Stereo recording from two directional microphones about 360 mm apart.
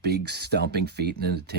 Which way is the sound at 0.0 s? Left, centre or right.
Right.